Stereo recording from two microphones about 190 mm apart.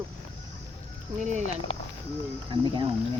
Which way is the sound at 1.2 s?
40° right (ahead or behind).